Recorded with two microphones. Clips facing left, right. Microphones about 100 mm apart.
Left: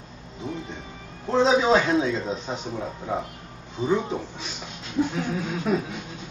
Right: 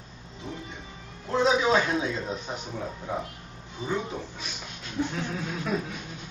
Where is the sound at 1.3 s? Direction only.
30° left (ahead or behind).